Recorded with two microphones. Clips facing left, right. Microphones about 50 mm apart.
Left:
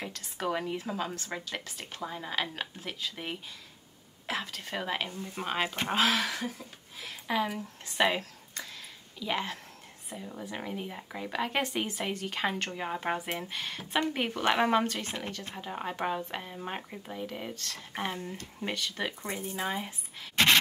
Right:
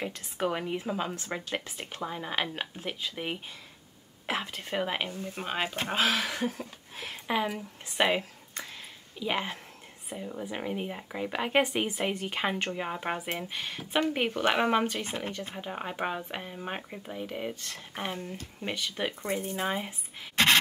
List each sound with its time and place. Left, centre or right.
0.0 s speech: centre
5.4 s speech: centre
7.3 s speech: right
17.9 s speech: centre